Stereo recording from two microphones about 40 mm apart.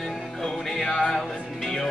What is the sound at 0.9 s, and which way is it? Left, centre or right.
Music, left.